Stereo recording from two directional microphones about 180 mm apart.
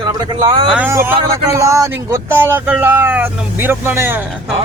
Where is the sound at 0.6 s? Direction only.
5° right (ahead or behind).